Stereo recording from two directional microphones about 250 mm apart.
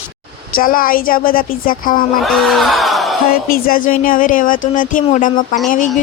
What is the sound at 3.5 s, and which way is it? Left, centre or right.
A woman's voice, left.